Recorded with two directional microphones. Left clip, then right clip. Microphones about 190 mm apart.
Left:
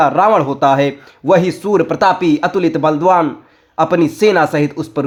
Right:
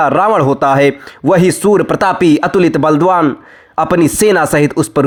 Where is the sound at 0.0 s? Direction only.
40° right (ahead or behind).